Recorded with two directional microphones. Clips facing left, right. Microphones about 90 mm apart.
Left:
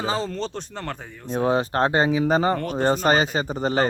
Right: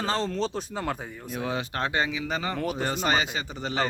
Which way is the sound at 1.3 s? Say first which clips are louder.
Left 10 dB; 35° left (ahead or behind).